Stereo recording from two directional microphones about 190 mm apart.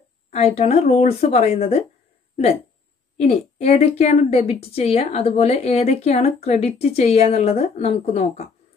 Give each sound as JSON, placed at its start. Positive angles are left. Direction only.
{"t": 0.3, "sound": "a woman's voice", "side_deg": 35}
{"t": 3.2, "sound": "a woman's voice", "side_deg": 35}